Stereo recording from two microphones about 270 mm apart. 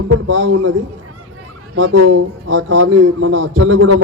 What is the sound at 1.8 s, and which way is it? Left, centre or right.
A man's voice, right.